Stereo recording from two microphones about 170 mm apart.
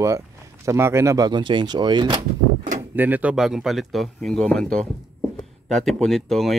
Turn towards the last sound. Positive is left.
turn(degrees=0)  # may be behind; listen again after turning